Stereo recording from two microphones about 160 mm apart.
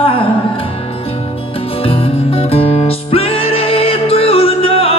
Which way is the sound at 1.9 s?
35° left (ahead or behind).